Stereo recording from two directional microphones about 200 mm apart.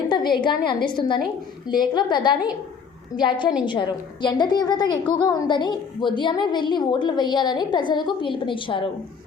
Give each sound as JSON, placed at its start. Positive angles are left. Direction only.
{"t": 0.1, "sound": "a woman's voice", "side_deg": 20}